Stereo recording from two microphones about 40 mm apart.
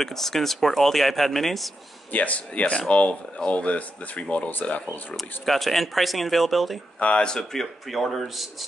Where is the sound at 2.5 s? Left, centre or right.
Left.